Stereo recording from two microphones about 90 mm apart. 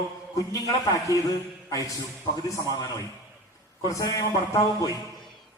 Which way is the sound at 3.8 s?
40° left (ahead or behind).